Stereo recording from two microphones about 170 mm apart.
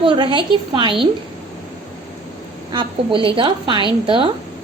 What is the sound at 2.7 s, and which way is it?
A woman's voice, 30° right (ahead or behind).